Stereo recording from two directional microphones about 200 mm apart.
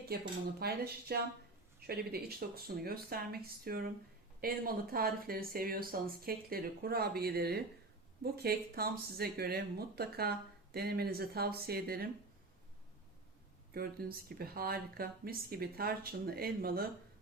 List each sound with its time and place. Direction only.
0.1 s speech: 50° right (ahead or behind)
13.7 s speech: 50° right (ahead or behind)